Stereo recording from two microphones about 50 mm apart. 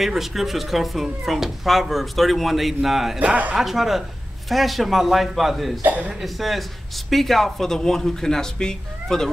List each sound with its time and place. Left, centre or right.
0.0 s speech: centre
3.2 s speech: right
3.5 s speech: centre
5.9 s speech: right
6.2 s speech: centre